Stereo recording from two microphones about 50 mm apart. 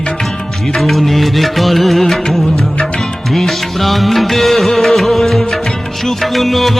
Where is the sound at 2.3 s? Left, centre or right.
Centre.